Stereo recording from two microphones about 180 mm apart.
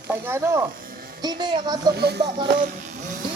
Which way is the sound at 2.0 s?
65° right (ahead or behind).